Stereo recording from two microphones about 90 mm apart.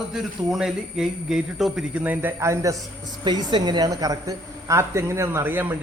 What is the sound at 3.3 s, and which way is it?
Speech, 55° right (ahead or behind).